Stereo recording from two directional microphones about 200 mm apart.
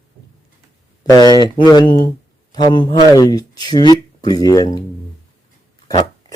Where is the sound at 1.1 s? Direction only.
20° left (ahead or behind).